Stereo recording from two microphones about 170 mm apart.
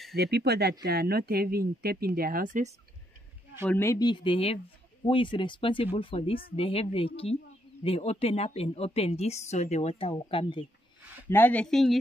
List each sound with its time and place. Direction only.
0.1 s speech: 70° right (ahead or behind); by 2.7 s 50° right (ahead or behind)
3.6 s a woman's voice: 15° left (ahead or behind); by 10.7 s 30° left (ahead or behind)
11.2 s speech: 10° left (ahead or behind)